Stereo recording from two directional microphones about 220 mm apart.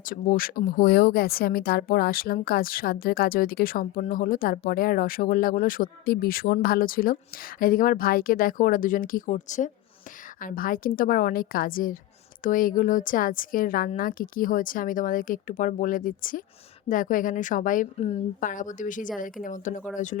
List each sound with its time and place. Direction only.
0.0 s speech: 40° left (ahead or behind)